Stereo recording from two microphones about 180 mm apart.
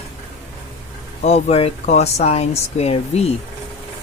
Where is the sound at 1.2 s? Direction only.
40° left (ahead or behind).